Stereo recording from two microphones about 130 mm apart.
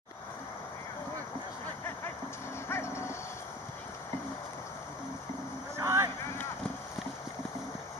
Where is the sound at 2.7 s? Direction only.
20° left (ahead or behind).